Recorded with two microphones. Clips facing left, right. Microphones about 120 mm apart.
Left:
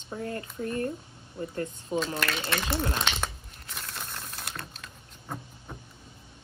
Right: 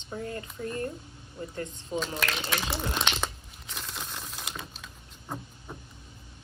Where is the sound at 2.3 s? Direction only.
Centre (ahead or behind).